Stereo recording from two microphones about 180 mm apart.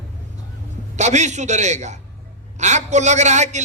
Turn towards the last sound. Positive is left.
turn(degrees=-40)  # may be behind; listen again after turning